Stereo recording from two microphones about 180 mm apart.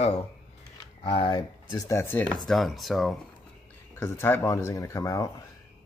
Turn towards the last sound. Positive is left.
turn(degrees=15)  # may be behind; listen again after turning